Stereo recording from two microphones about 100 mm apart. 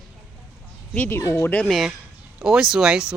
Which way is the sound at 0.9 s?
15° left (ahead or behind).